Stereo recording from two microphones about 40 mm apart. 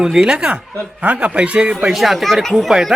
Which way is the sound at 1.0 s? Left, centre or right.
Right.